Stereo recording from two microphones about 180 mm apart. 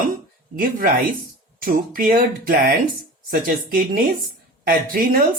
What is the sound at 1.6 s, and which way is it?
Speech, 50° right (ahead or behind).